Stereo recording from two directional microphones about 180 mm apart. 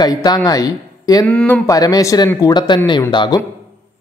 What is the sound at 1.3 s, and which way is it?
Speech, 10° left (ahead or behind).